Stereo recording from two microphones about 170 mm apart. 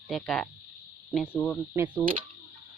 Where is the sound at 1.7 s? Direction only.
10° right (ahead or behind).